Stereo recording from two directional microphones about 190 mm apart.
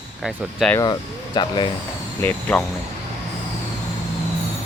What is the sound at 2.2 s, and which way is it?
Speech, 10° left (ahead or behind).